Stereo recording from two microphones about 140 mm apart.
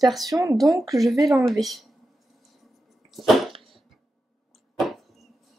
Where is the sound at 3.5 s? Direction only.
40° right (ahead or behind).